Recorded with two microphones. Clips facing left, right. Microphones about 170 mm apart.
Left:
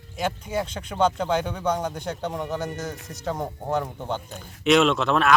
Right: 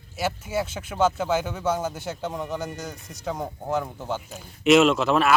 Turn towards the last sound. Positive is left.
turn(degrees=0)  # may be behind; listen again after turning